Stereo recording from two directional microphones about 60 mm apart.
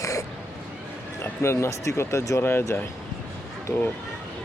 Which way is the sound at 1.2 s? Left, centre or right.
Left.